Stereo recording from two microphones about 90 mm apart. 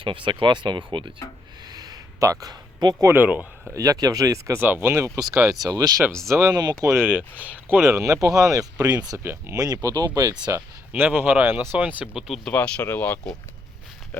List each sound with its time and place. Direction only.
0.0 s speech: 65° right (ahead or behind)
1.7 s a sound: 50° right (ahead or behind)
3.1 s speech: 20° right (ahead or behind)
3.8 s speech: 45° right (ahead or behind)
4.6 s speech: 25° right (ahead or behind); by 5.9 s 45° right (ahead or behind)
6.3 s speech: 35° right (ahead or behind)
6.8 s speech: 30° right (ahead or behind)
7.1 s speech: 15° right (ahead or behind)
7.9 s speech: 35° right (ahead or behind)
9.1 s speech: 30° right (ahead or behind)
9.6 s speech: 40° right (ahead or behind)
10.9 s speech: 20° right (ahead or behind)
12.1 s speech: centre (ahead or behind)
12.5 s speech: 15° left (ahead or behind)